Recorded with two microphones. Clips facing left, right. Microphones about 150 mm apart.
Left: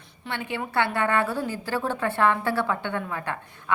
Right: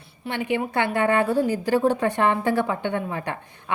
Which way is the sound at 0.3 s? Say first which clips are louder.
Right 6 dB; 15° right (ahead or behind).